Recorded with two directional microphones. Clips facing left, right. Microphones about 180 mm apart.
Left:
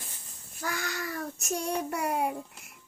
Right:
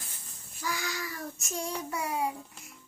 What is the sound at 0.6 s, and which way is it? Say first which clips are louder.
Child singing: left 1 dB; 55° left (ahead or behind).